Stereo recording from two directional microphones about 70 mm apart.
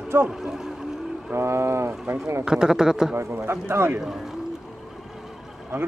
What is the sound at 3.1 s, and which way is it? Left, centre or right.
Speech, right.